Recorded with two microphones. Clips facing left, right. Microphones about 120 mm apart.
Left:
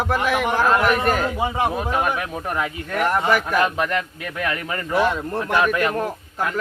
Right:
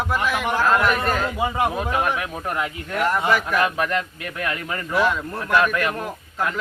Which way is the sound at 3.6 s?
20° left (ahead or behind).